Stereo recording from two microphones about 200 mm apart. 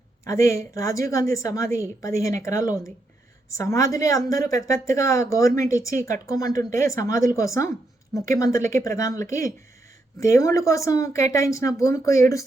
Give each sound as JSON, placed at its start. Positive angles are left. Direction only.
{"t": 0.3, "sound": "a woman's voice", "side_deg": 15}